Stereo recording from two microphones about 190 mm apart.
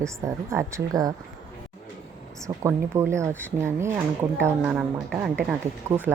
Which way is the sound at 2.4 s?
15° right (ahead or behind).